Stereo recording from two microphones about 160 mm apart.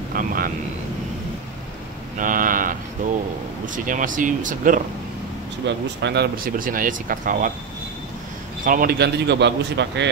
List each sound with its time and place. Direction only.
0.1 s speech: 65° right (ahead or behind)
2.1 s a sound: 60° right (ahead or behind)
3.6 s speech: 55° right (ahead or behind)
5.7 s a man's voice: 90° right
6.0 s speech: 75° right (ahead or behind); by 7.5 s 55° right (ahead or behind)
8.6 s a man's voice: 65° right (ahead or behind); by 10.0 s 90° right